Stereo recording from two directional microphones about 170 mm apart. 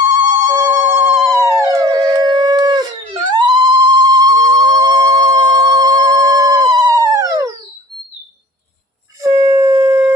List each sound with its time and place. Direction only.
0.2 s telephone: 20° right (ahead or behind)
0.8 s howl: 10° right (ahead or behind)
9.2 s shofar: 20° right (ahead or behind)